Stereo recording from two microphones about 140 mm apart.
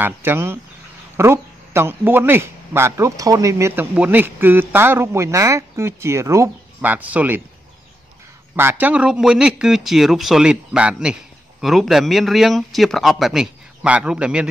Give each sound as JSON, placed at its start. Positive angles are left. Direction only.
{"t": 0.0, "sound": "speech", "side_deg": -15}
{"t": 8.5, "sound": "speech", "side_deg": -15}